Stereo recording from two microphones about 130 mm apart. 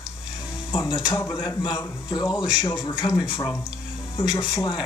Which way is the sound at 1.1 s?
20° left (ahead or behind).